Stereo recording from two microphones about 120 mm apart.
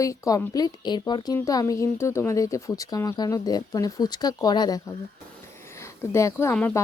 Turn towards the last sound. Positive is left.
turn(degrees=20)  # may be behind; listen again after turning